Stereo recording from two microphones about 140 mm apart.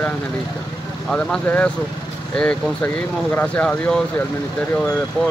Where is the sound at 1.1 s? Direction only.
5° left (ahead or behind).